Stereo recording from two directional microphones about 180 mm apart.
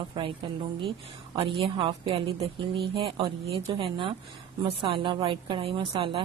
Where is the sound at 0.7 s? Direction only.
30° right (ahead or behind).